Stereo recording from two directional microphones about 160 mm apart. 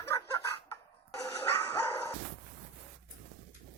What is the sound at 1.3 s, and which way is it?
Bow-wow, 15° left (ahead or behind).